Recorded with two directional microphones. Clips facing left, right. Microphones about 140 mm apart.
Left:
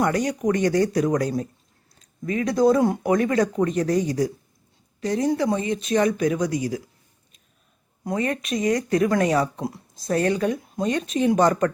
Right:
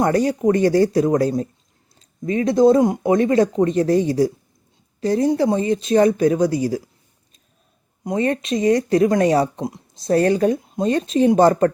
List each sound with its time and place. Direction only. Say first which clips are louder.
0.0 s a woman's voice: right 5 dB; 30° right (ahead or behind)
8.0 s speech: right 5 dB; 25° right (ahead or behind)